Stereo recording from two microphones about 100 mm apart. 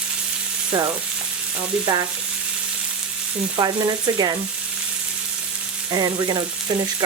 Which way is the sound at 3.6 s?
40° right (ahead or behind).